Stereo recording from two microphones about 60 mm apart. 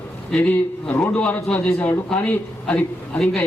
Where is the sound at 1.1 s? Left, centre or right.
Left.